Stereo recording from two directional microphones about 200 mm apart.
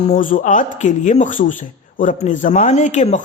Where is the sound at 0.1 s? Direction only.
40° left (ahead or behind).